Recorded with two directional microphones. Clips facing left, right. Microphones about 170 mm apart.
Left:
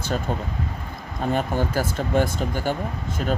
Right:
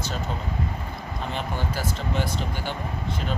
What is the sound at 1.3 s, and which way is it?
Speech, 45° left (ahead or behind).